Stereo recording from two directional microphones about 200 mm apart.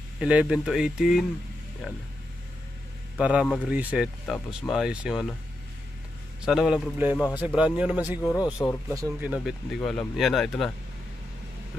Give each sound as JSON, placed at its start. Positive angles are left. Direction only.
{"t": 0.2, "sound": "speech", "side_deg": -5}
{"t": 3.2, "sound": "speech", "side_deg": -5}
{"t": 3.7, "sound": "speech", "side_deg": -5}
{"t": 6.4, "sound": "speech", "side_deg": -5}
{"t": 8.2, "sound": "speech", "side_deg": 15}
{"t": 8.9, "sound": "speech", "side_deg": -10}